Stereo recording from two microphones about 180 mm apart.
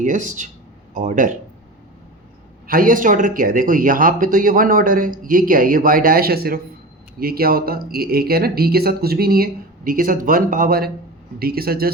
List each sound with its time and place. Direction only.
0.0 s speech: 45° right (ahead or behind)
2.6 s speech: 50° right (ahead or behind)